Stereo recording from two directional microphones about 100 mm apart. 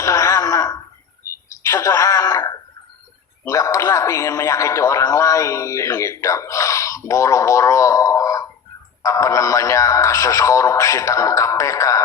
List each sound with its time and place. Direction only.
0.0 s wail: 30° left (ahead or behind)
1.6 s a sound: 35° left (ahead or behind)
3.4 s speech: 35° left (ahead or behind)